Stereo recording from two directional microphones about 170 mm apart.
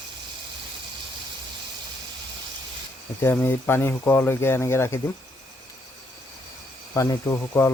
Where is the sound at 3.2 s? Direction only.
15° left (ahead or behind).